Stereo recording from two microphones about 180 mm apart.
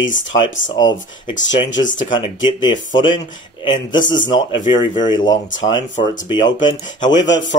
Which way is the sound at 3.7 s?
25° left (ahead or behind).